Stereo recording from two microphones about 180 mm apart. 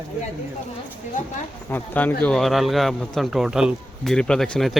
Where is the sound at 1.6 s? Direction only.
10° left (ahead or behind).